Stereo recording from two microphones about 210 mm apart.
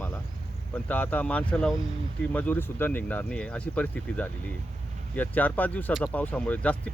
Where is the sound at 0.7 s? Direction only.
10° left (ahead or behind).